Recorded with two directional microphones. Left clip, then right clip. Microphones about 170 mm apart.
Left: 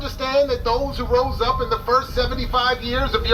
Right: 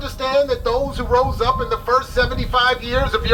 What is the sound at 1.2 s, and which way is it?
Speech, 45° right (ahead or behind).